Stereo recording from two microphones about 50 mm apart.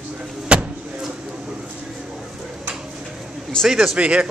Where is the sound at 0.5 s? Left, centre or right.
Right.